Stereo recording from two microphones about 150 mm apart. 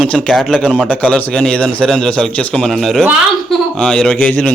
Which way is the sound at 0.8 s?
10° left (ahead or behind).